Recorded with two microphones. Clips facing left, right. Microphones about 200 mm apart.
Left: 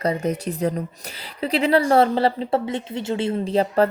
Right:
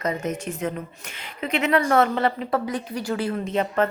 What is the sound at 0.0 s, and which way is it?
A woman's voice, 35° left (ahead or behind).